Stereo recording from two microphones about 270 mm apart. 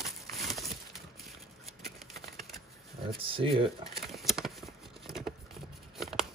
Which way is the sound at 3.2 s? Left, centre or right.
Centre.